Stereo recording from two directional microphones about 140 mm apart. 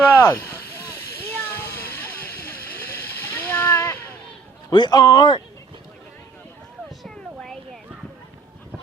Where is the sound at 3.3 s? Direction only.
15° left (ahead or behind).